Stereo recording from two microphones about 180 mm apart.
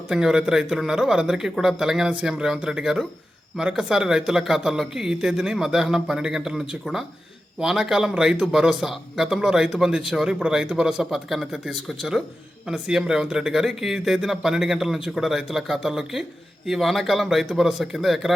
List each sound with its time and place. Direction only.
0.1 s speech: 5° right (ahead or behind)